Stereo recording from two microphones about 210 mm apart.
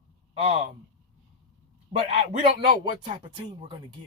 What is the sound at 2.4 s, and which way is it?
Speech, 20° right (ahead or behind).